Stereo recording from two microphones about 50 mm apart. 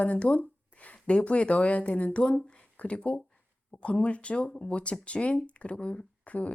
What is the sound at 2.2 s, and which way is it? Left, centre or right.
Speech, centre.